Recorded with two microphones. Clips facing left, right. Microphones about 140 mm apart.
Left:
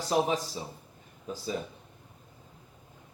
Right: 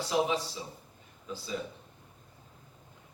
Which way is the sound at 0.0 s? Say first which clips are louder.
Left 2 dB; 45° left (ahead or behind).